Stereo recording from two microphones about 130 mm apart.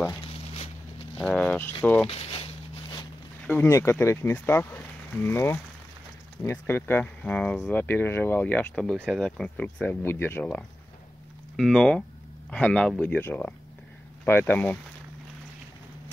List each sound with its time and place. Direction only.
1.2 s speech: 5° left (ahead or behind)
2.0 s a sound: 50° left (ahead or behind)
3.4 s speech: 20° left (ahead or behind)
11.5 s speech: centre (ahead or behind)